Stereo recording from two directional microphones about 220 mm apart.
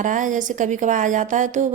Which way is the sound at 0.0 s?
35° right (ahead or behind).